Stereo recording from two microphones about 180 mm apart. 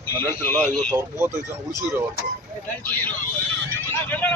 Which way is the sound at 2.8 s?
10° left (ahead or behind).